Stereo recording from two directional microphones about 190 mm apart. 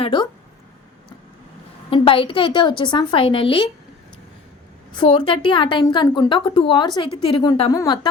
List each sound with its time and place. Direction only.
0.0 s speech: 25° left (ahead or behind)
1.9 s a woman's voice: 30° left (ahead or behind)
4.9 s a woman's voice: 25° left (ahead or behind)
7.7 s speech: 20° left (ahead or behind)